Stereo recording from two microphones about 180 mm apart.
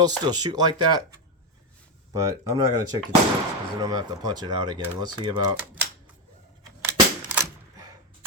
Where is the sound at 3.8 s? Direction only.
20° right (ahead or behind).